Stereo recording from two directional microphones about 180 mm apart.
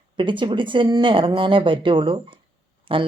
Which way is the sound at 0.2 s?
25° right (ahead or behind).